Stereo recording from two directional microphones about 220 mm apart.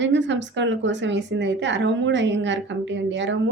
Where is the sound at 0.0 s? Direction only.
55° right (ahead or behind).